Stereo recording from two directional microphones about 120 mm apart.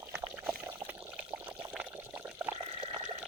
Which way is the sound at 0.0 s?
20° right (ahead or behind).